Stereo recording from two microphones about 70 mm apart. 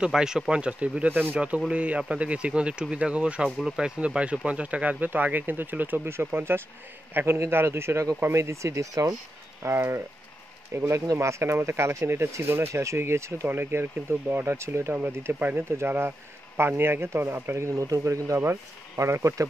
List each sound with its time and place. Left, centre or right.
0.0 s speech: centre; by 15.0 s right
15.0 s speech: right
18.4 s speech: right